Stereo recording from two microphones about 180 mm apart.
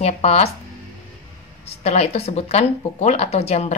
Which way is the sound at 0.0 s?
35° left (ahead or behind).